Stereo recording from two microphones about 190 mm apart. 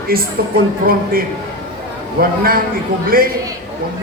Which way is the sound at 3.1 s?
50° right (ahead or behind).